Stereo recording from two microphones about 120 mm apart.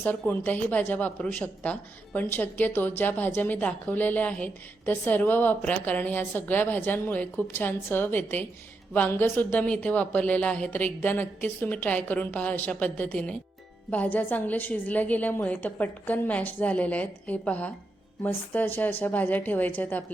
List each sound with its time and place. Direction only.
0.0 s a woman's voice: 15° left (ahead or behind)